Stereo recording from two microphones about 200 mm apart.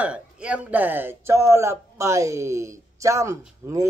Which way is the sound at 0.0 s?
5° right (ahead or behind).